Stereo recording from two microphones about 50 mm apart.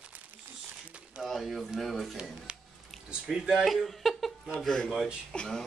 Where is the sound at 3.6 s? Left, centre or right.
Centre.